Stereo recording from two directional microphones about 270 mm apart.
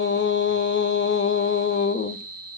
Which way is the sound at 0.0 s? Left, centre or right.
Left.